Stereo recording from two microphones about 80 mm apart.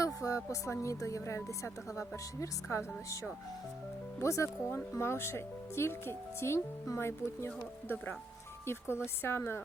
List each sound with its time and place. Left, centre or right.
0.0 s a sound: left
0.5 s speech: left
4.2 s speech: left